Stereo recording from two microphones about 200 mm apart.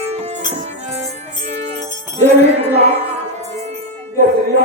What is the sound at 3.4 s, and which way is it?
Music, 35° right (ahead or behind).